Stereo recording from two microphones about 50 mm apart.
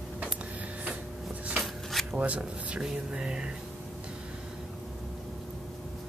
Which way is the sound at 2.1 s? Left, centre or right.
Right.